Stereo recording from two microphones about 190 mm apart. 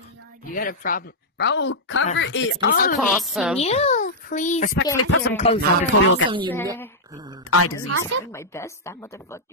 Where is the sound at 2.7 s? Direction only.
50° left (ahead or behind).